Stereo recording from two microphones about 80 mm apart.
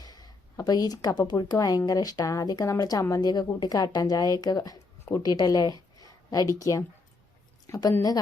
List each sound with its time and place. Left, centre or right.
0.0 s a sound: left
1.3 s speech: left
3.2 s speech: left